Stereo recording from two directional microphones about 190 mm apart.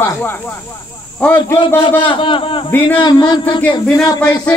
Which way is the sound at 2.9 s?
20° left (ahead or behind).